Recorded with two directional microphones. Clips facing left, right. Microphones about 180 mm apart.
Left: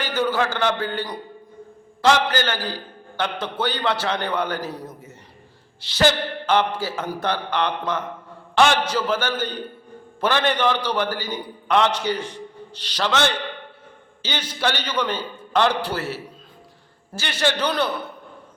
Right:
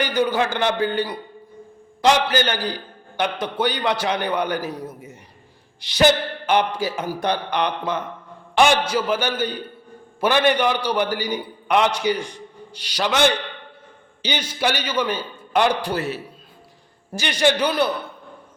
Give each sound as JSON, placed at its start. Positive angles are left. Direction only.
{"t": 0.0, "sound": "speech", "side_deg": -15}